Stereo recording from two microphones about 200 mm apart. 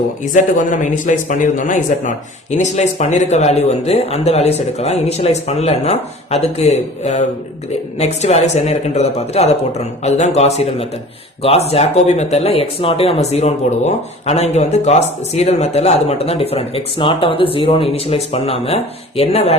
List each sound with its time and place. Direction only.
0.7 s speech: 40° left (ahead or behind)